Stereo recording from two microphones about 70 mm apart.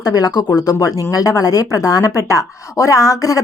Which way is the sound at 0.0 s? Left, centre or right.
Left.